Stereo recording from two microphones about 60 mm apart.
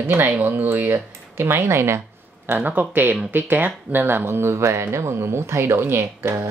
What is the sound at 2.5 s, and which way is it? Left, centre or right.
Speech, right.